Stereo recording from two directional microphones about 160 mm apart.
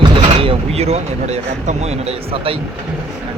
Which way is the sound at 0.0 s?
35° right (ahead or behind).